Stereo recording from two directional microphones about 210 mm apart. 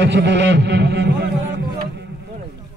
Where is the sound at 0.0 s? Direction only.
55° right (ahead or behind).